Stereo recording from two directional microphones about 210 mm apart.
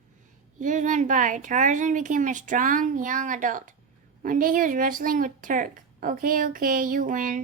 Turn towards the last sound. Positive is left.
turn(degrees=-40)  # may be behind; listen again after turning